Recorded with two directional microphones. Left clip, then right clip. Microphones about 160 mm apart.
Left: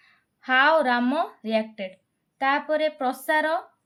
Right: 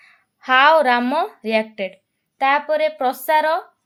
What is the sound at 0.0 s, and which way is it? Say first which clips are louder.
A woman's voice: right 6 dB; 30° right (ahead or behind).